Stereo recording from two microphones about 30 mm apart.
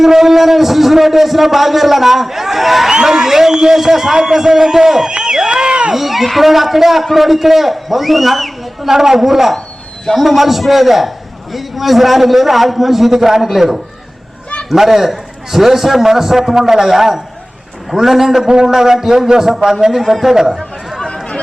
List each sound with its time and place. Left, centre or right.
0.0 s a man's voice: centre
2.9 s a man's voice: centre
3.5 s a man's voice: right
3.8 s a man's voice: centre
5.1 s a sound: right
5.9 s a man's voice: centre
8.9 s a man's voice: centre
18.4 s a man's voice: right
18.7 s a man's voice: centre
21.1 s run: left